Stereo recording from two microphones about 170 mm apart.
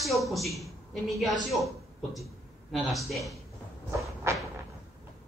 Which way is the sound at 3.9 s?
15° right (ahead or behind).